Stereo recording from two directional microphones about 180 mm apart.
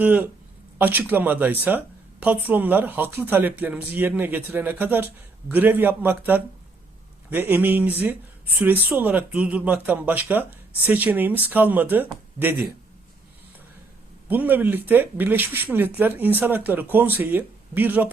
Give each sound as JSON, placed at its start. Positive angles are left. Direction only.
{"t": 0.0, "sound": "speech", "side_deg": -10}
{"t": 14.3, "sound": "speech", "side_deg": -10}